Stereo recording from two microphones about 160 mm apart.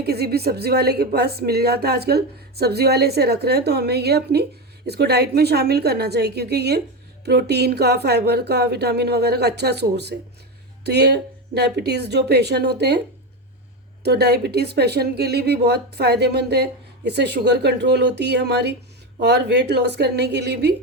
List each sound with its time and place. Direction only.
0.0 s a woman's voice: 80° right
14.0 s speech: 90° right